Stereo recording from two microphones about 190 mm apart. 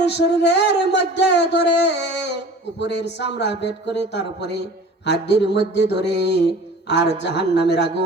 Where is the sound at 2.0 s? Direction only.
65° left (ahead or behind).